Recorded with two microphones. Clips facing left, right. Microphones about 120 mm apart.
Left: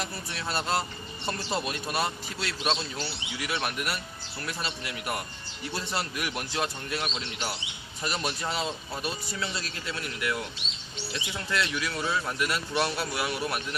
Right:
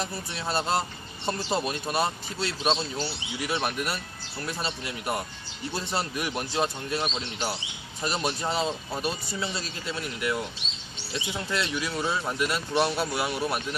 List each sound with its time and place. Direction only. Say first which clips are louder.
0.0 s speech: right 2 dB; 25° right (ahead or behind)